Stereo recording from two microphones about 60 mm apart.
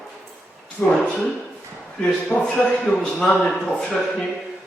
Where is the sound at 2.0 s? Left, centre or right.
Centre.